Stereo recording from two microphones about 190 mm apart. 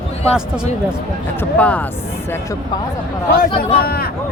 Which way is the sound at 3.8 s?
55° left (ahead or behind).